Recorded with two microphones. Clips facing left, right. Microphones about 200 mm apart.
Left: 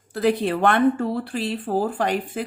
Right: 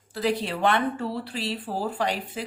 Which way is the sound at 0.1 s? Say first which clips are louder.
Left 6 dB; 55° left (ahead or behind).